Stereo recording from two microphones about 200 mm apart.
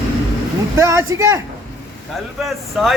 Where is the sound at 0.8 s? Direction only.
15° right (ahead or behind).